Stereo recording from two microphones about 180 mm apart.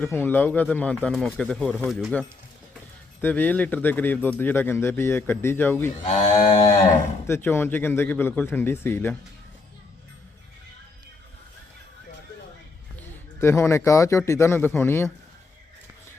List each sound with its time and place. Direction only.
0.0 s speech: 10° left (ahead or behind)
6.1 s speech: 40° left (ahead or behind)
7.3 s speech: 15° left (ahead or behind)
13.0 s a man's voice: 15° left (ahead or behind)